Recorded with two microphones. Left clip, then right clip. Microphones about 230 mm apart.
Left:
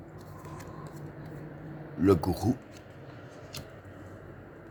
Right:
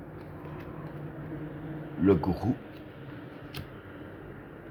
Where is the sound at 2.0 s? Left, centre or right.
Left.